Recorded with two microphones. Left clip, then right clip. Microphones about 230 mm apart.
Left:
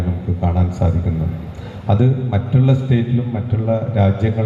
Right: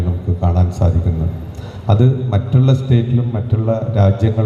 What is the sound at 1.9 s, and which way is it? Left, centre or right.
A man's voice, right.